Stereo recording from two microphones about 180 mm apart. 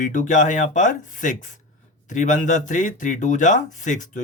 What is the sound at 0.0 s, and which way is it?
A man's voice, 45° left (ahead or behind).